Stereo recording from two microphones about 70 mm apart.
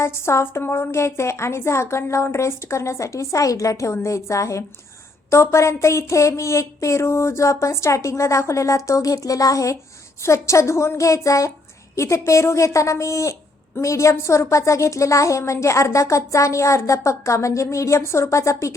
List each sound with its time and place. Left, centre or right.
0.0 s a woman's voice: left